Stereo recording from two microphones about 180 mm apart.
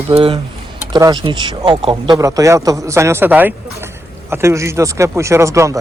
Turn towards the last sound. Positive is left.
turn(degrees=-15)  # may be behind; listen again after turning